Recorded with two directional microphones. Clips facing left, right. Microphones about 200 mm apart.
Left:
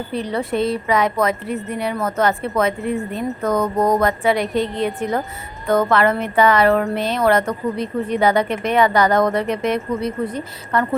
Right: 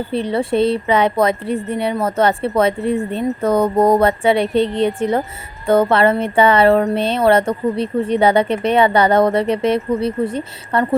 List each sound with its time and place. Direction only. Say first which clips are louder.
0.1 s a woman's voice: right 4 dB; 30° right (ahead or behind)